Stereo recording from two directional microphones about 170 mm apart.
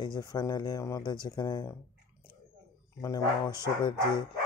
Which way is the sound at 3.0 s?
20° left (ahead or behind).